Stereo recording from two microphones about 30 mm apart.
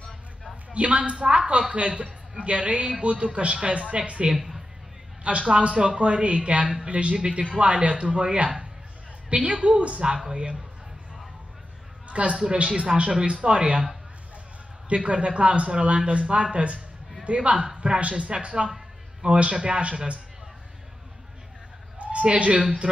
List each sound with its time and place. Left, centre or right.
0.7 s a man's voice: right
5.5 s a man's voice: right
12.1 s a woman's voice: right
14.9 s a man's voice: right
21.9 s a sound: right